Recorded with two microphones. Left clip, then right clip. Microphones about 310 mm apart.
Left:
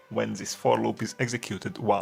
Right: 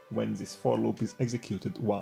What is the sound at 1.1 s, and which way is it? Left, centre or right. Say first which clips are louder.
Speech: left 4 dB; left.